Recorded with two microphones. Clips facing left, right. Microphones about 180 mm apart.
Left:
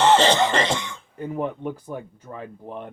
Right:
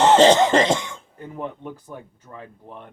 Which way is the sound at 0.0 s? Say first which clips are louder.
Right 4 dB; 45° right (ahead or behind).